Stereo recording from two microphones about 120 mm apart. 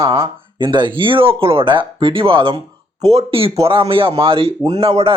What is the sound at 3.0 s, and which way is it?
A man's voice, 60° right (ahead or behind).